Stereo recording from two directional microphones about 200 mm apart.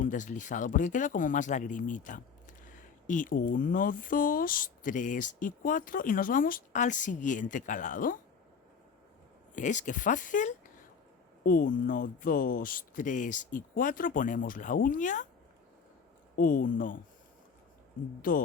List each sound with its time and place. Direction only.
0.0 s speech: 40° left (ahead or behind)
9.6 s speech: 40° left (ahead or behind)
16.3 s speech: 45° left (ahead or behind)
18.2 s speech: 45° left (ahead or behind)